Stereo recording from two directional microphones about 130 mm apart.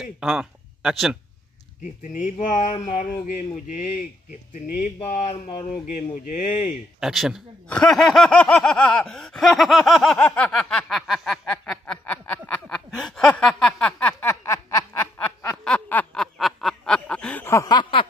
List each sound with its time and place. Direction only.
0.0 s speech: 5° right (ahead or behind)
1.8 s speech: 75° left (ahead or behind)
5.1 s a sound: 60° left (ahead or behind)
5.7 s speech: 90° left
7.0 s snicker: 5° right (ahead or behind)
10.1 s a sound: 10° left (ahead or behind)
14.3 s snicker: 25° left (ahead or behind)
15.1 s snicker: 10° left (ahead or behind)
17.5 s snicker: 25° left (ahead or behind)